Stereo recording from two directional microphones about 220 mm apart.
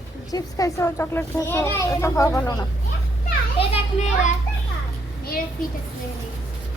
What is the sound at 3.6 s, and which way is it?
Speech, 30° left (ahead or behind).